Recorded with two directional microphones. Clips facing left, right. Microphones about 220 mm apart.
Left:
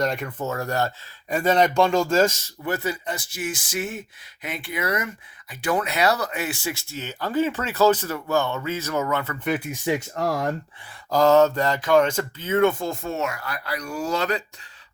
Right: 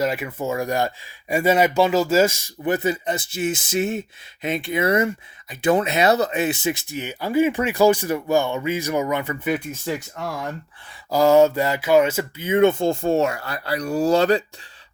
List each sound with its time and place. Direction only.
0.0 s speech: 5° right (ahead or behind)
9.6 s speech: 15° left (ahead or behind)
10.2 s speech: 40° left (ahead or behind)
11.1 s speech: 10° right (ahead or behind); by 14.4 s 30° right (ahead or behind)